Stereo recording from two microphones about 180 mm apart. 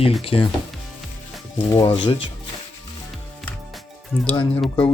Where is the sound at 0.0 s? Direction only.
35° left (ahead or behind).